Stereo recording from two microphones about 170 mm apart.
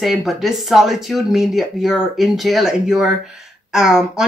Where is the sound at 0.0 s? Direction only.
Centre (ahead or behind).